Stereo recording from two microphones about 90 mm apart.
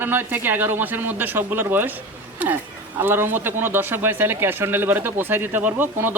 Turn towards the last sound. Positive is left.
turn(degrees=-20)  # may be behind; listen again after turning